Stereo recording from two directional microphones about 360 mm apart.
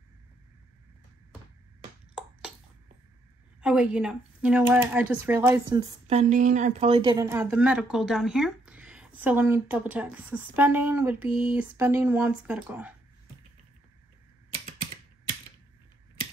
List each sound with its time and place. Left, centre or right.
3.6 s speech: centre
14.5 s typing: right